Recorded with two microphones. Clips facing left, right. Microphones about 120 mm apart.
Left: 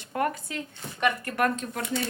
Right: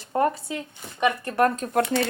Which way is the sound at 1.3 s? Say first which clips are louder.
Right 5 dB; 35° right (ahead or behind).